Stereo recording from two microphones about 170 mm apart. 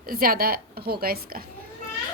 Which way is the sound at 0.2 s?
60° right (ahead or behind).